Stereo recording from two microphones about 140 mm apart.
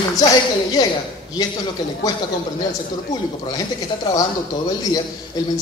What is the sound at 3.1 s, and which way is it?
Speech, 25° left (ahead or behind).